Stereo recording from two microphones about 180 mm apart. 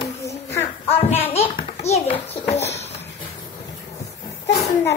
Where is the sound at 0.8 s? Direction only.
35° left (ahead or behind).